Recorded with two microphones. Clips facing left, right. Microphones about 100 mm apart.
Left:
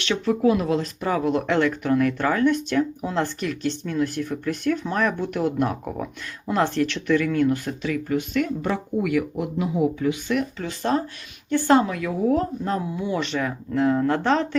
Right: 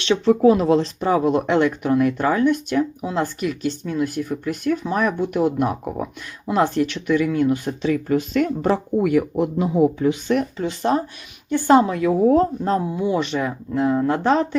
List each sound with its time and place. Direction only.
0.0 s speech: 25° right (ahead or behind)
10.6 s a woman's voice: 20° right (ahead or behind)
11.9 s speech: 30° right (ahead or behind)